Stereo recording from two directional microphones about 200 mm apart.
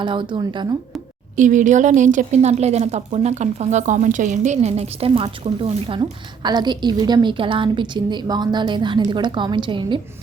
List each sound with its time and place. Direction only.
0.0 s a woman's voice: 25° right (ahead or behind)
1.4 s a woman's voice: 40° right (ahead or behind); by 10.0 s 25° right (ahead or behind)